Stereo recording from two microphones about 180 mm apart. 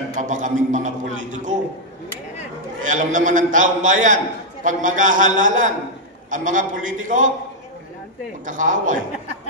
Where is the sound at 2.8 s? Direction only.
45° right (ahead or behind).